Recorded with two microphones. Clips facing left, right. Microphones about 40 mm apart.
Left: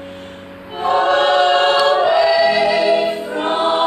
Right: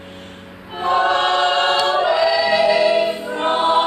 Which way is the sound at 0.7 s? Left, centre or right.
Centre.